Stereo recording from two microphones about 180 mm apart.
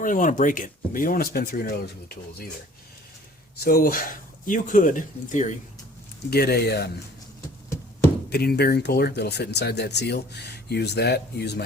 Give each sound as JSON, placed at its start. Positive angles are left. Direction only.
{"t": 0.0, "sound": "speech", "side_deg": 45}
{"t": 3.6, "sound": "speech", "side_deg": 55}
{"t": 6.3, "sound": "speech", "side_deg": 60}
{"t": 8.3, "sound": "speech", "side_deg": 60}